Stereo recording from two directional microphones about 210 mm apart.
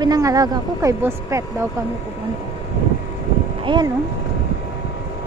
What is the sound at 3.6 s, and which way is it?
Speech, 20° right (ahead or behind).